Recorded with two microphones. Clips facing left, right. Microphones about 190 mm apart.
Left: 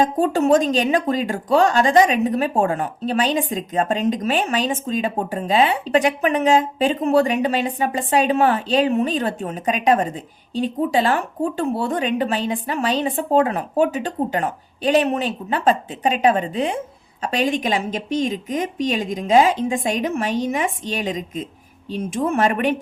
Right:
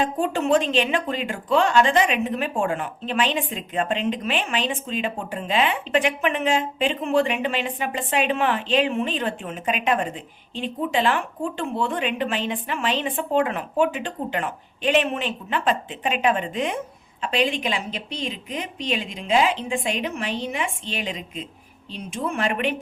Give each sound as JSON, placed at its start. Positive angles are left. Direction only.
{"t": 0.0, "sound": "speech", "side_deg": 40}